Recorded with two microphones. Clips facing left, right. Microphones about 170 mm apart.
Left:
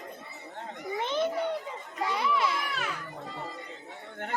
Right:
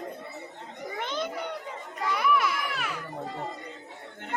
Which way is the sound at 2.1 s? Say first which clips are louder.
Right 3 dB; 25° left (ahead or behind).